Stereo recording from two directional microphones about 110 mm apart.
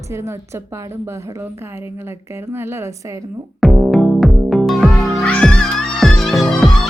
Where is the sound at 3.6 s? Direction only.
Centre (ahead or behind).